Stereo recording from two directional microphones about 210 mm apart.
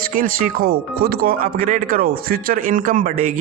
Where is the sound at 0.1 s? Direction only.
40° right (ahead or behind).